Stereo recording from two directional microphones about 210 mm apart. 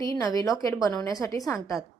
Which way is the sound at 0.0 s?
15° left (ahead or behind).